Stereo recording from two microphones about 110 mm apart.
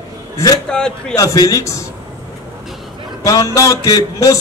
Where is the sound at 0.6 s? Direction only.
5° left (ahead or behind).